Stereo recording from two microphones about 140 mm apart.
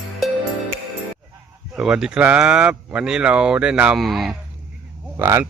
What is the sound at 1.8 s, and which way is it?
Speech, 5° right (ahead or behind).